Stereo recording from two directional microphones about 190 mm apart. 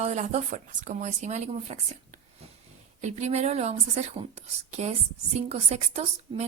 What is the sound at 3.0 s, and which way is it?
A woman's voice, 35° right (ahead or behind).